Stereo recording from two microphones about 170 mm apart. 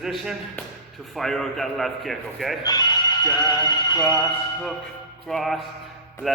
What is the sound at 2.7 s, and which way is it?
Speech, 25° left (ahead or behind).